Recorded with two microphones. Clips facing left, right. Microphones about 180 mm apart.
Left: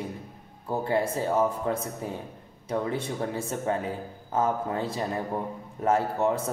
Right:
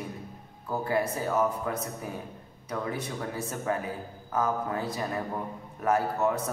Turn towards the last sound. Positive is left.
turn(degrees=25)  # may be behind; listen again after turning